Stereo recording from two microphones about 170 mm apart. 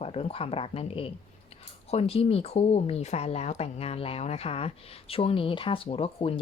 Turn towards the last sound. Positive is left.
turn(degrees=35)  # may be behind; listen again after turning